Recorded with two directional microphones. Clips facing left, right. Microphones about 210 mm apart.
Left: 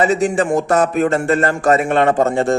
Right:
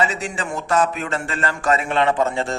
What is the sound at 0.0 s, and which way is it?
A man's voice, 50° left (ahead or behind).